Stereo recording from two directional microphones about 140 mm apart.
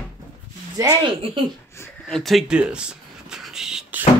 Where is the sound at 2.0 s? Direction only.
Centre (ahead or behind).